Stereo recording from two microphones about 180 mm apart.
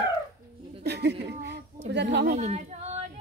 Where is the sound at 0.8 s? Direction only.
65° right (ahead or behind).